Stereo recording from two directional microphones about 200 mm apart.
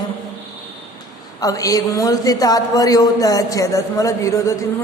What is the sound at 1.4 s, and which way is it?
A man's voice, 15° left (ahead or behind).